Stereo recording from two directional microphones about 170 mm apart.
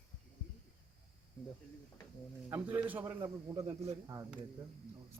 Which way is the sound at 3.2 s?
20° right (ahead or behind).